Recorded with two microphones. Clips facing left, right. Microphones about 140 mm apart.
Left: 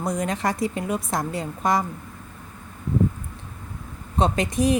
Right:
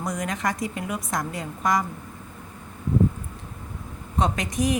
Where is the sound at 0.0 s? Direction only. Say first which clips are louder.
Left 3 dB; 30° left (ahead or behind).